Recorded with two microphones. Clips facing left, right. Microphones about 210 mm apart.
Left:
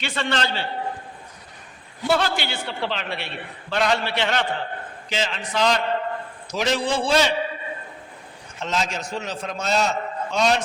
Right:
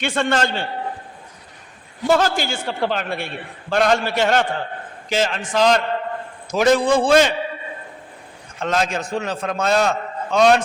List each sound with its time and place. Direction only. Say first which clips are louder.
0.0 s a man's voice: right 5 dB; 50° right (ahead or behind)
2.0 s a man's voice: right 4 dB; 45° right (ahead or behind)
8.6 s a man's voice: right 5 dB; 55° right (ahead or behind)